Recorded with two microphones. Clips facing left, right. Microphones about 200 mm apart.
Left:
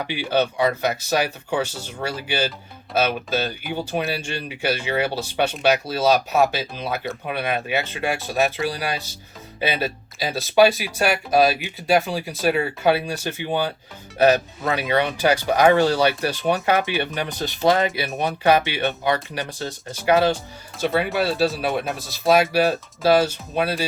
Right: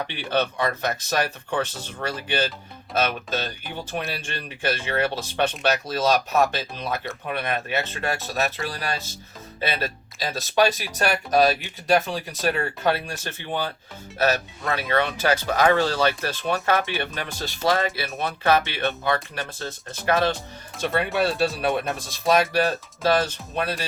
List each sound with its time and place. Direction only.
0.1 s speech: 10° left (ahead or behind)
20.8 s speech: centre (ahead or behind)